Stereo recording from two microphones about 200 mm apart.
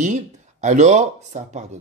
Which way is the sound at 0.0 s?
35° right (ahead or behind).